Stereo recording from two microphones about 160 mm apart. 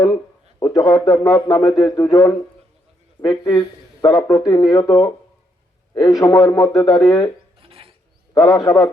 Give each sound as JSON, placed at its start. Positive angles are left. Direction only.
{"t": 0.6, "sound": "speech", "side_deg": 25}
{"t": 7.6, "sound": "filing", "side_deg": -35}
{"t": 8.3, "sound": "speech", "side_deg": 20}